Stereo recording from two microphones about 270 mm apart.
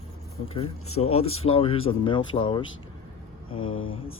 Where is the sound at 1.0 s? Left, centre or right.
Left.